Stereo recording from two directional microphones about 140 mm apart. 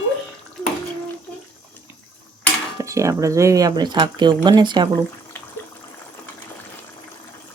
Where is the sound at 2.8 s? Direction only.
20° right (ahead or behind).